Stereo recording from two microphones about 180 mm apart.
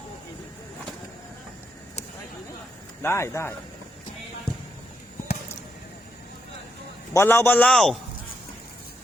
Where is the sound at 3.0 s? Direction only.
15° left (ahead or behind).